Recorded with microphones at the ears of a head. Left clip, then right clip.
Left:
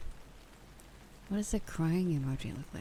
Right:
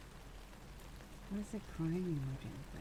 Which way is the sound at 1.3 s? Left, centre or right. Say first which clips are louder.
Left 10 dB; left.